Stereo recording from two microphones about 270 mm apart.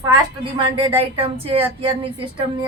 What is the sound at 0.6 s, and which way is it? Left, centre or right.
Speech, centre.